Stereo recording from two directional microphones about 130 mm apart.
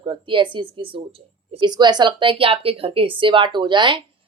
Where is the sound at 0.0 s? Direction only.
40° right (ahead or behind).